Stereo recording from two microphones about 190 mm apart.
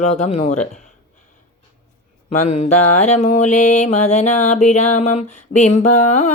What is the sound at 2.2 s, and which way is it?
Mantra, 35° left (ahead or behind).